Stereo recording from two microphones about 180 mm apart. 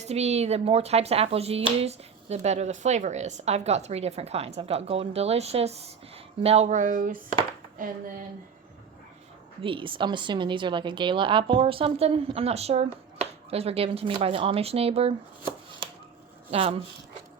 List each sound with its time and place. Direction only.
0.0 s a woman's voice: 35° right (ahead or behind)
9.6 s a woman's voice: 30° right (ahead or behind)
16.5 s a woman's voice: 35° right (ahead or behind)